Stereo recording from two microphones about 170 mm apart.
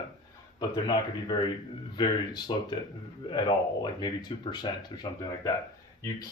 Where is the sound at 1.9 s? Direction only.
25° left (ahead or behind).